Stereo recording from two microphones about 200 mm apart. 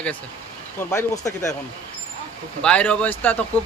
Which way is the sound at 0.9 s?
15° left (ahead or behind).